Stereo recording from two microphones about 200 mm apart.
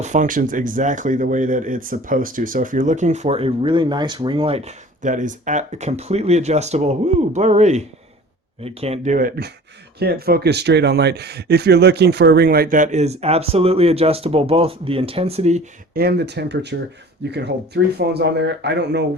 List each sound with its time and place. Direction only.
0.0 s speech: 40° right (ahead or behind)
16.0 s speech: 55° right (ahead or behind)